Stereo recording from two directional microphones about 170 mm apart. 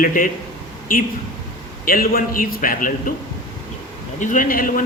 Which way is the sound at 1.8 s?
55° left (ahead or behind).